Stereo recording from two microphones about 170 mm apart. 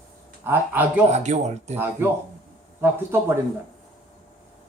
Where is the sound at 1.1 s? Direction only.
45° right (ahead or behind).